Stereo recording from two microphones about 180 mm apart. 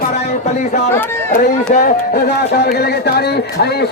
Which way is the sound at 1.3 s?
50° left (ahead or behind).